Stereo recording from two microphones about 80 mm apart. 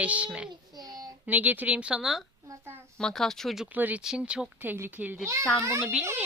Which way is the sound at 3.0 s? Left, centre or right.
Centre.